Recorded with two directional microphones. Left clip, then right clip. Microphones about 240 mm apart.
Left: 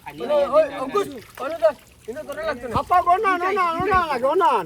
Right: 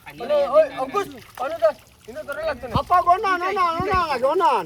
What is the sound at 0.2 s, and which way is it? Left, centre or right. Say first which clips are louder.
Speech: right 1 dB; right.